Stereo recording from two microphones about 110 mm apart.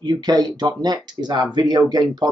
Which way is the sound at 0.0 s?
35° right (ahead or behind).